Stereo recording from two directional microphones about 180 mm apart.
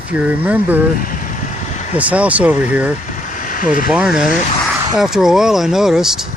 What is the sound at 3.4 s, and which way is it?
Vehicle, 45° left (ahead or behind).